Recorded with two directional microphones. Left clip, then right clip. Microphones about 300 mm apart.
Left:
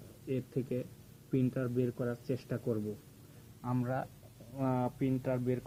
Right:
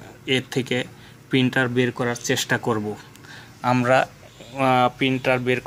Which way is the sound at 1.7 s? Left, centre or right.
Right.